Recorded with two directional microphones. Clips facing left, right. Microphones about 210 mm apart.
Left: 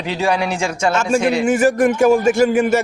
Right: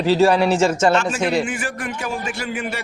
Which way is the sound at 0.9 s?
45° left (ahead or behind).